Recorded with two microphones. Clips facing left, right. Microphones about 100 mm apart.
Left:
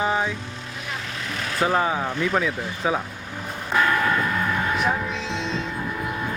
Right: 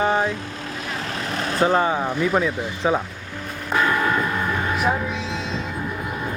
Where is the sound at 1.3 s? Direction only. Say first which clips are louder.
Right 4 dB; 35° right (ahead or behind).